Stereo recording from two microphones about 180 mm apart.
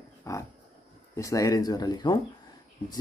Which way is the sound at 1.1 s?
20° left (ahead or behind).